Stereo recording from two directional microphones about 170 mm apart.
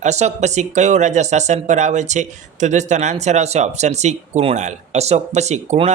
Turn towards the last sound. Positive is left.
turn(degrees=-40)  # may be behind; listen again after turning